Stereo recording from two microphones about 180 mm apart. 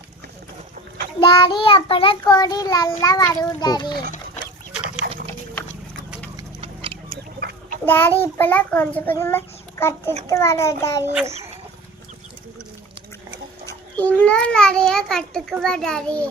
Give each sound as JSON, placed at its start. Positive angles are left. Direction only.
{"t": 1.2, "sound": "child singing", "side_deg": 25}
{"t": 5.0, "sound": "dog", "side_deg": -65}
{"t": 6.6, "sound": "a sound", "side_deg": -30}
{"t": 7.1, "sound": "pig", "side_deg": -55}
{"t": 7.9, "sound": "a child's voice", "side_deg": 10}
{"t": 13.7, "sound": "a child's voice", "side_deg": 10}